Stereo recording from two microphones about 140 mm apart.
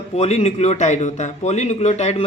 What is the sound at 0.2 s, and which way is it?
Speech, 50° left (ahead or behind).